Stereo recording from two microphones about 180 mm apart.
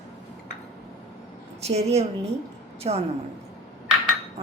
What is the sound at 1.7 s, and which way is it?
A woman's voice, 35° right (ahead or behind).